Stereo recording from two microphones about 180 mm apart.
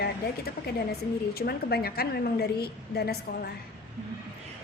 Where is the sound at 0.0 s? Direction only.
60° left (ahead or behind).